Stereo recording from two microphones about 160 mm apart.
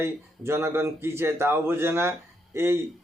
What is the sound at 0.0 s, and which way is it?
A man's voice, 15° right (ahead or behind).